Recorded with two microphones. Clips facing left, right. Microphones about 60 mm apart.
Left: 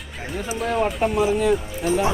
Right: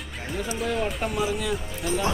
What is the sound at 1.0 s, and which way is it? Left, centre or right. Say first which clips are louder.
Speech: left 7 dB; left.